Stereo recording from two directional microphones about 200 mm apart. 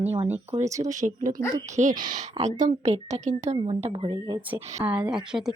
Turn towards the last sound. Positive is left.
turn(degrees=0)  # may be behind; listen again after turning